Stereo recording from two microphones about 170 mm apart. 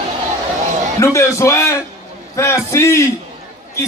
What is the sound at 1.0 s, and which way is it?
Speech, 15° left (ahead or behind).